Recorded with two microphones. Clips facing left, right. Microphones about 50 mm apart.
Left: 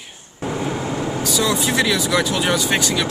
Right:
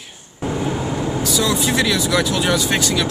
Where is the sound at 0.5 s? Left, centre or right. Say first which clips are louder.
Right 1 dB; left.